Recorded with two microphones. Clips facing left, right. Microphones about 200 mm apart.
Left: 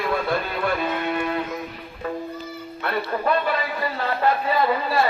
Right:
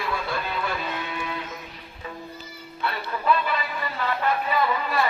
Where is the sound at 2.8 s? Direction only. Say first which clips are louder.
Left 4 dB; 50° left (ahead or behind).